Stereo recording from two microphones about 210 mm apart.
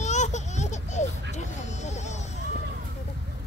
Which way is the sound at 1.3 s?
35° left (ahead or behind).